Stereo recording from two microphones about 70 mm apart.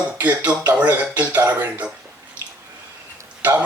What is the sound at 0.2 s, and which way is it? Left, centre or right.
Speech, right.